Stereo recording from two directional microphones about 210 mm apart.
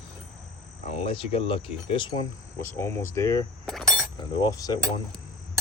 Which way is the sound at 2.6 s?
10° left (ahead or behind).